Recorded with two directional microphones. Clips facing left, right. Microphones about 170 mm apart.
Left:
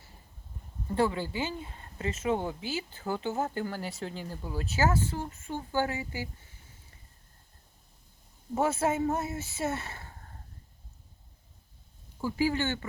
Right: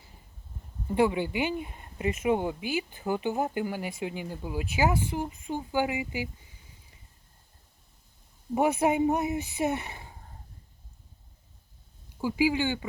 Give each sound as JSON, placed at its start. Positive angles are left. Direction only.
{"t": 0.9, "sound": "speech", "side_deg": -15}
{"t": 8.5, "sound": "speech", "side_deg": -15}
{"t": 12.2, "sound": "speech", "side_deg": -10}